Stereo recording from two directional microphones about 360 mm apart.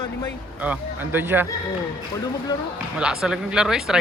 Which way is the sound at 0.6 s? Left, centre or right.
Centre.